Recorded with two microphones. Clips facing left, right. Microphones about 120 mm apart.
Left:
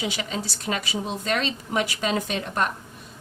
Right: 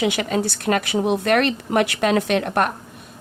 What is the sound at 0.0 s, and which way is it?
A woman's voice, 60° right (ahead or behind).